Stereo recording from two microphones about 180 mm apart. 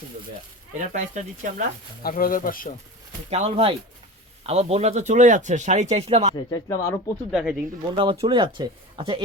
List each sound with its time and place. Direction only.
0.8 s speech: 45° right (ahead or behind)
2.0 s speech: 50° left (ahead or behind)
3.2 s a man's voice: 35° right (ahead or behind)
6.3 s speech: 20° left (ahead or behind)
7.3 s speech: 5° right (ahead or behind)
7.9 s speech: 30° right (ahead or behind)